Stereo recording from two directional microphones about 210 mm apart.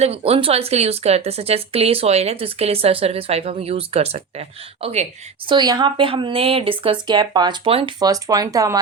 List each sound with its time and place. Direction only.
0.0 s speech: 30° right (ahead or behind)
5.5 s speech: 20° right (ahead or behind)